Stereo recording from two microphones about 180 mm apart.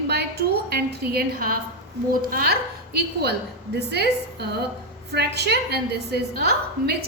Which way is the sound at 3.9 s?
65° right (ahead or behind).